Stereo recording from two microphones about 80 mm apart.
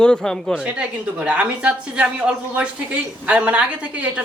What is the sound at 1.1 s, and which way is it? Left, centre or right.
Speech, centre.